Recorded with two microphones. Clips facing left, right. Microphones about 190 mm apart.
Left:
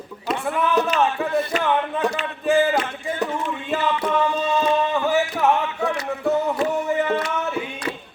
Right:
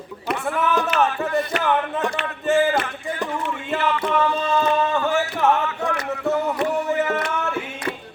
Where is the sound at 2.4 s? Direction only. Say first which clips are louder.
Even; centre (ahead or behind).